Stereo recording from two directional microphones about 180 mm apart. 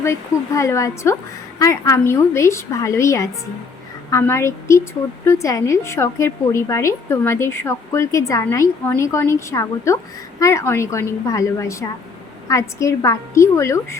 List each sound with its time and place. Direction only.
0.0 s a woman's voice: 15° left (ahead or behind)